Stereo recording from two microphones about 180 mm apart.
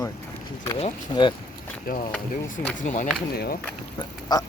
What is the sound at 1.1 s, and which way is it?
Duck, 25° left (ahead or behind).